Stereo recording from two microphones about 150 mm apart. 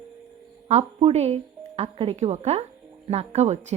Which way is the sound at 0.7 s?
45° right (ahead or behind).